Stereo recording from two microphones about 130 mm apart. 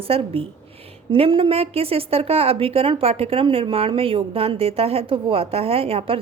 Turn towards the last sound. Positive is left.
turn(degrees=-45)  # may be behind; listen again after turning